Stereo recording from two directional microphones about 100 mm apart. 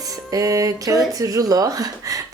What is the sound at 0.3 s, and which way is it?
Speech, 35° right (ahead or behind).